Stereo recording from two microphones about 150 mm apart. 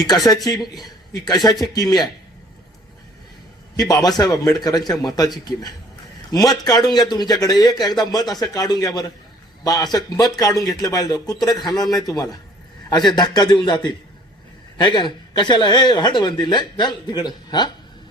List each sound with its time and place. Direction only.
0.4 s a man's voice: 25° left (ahead or behind)
3.8 s speech: 25° left (ahead or behind)